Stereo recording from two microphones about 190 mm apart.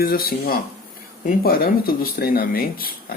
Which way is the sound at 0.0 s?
50° left (ahead or behind).